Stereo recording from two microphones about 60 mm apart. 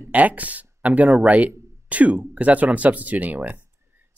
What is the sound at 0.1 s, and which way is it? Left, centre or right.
Speech, right.